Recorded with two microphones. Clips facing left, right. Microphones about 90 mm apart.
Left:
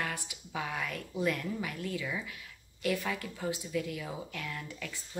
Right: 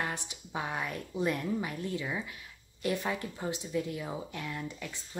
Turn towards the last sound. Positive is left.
turn(degrees=-20)  # may be behind; listen again after turning